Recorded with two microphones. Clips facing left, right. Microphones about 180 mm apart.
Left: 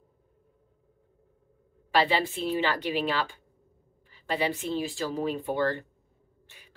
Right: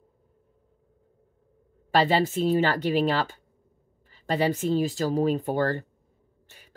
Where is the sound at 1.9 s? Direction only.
45° right (ahead or behind).